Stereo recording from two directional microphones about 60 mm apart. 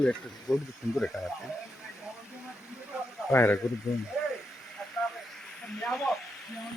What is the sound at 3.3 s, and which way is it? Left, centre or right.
Speech, left.